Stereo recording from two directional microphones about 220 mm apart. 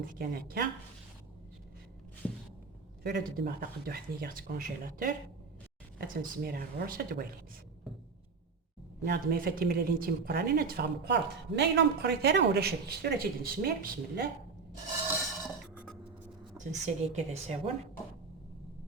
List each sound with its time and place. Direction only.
0.0 s speech: 40° right (ahead or behind)
2.2 s a sound: 5° left (ahead or behind)
3.0 s speech: 45° right (ahead or behind)
9.0 s speech: 45° right (ahead or behind)
16.6 s speech: 30° right (ahead or behind)